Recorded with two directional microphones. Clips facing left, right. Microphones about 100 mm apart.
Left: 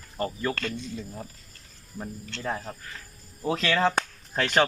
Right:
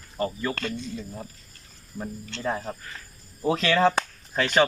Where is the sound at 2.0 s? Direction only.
15° right (ahead or behind).